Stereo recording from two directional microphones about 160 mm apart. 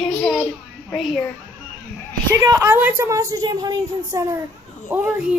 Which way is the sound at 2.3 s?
20° right (ahead or behind).